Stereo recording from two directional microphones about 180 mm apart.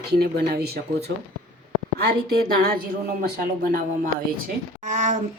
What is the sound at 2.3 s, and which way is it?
Speech, 55° right (ahead or behind).